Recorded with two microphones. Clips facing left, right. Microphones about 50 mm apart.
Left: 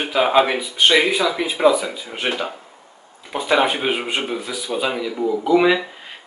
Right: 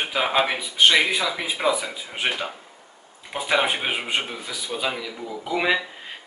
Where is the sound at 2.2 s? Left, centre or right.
Centre.